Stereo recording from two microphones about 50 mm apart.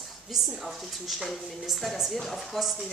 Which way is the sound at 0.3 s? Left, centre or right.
Centre.